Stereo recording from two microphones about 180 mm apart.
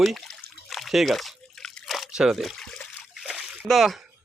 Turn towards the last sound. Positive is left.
turn(degrees=0)  # may be behind; listen again after turning